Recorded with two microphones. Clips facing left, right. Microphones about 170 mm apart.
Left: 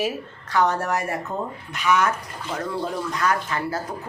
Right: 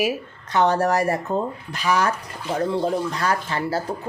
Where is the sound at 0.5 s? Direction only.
30° right (ahead or behind).